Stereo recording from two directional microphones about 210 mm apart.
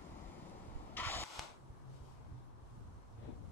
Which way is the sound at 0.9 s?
10° left (ahead or behind).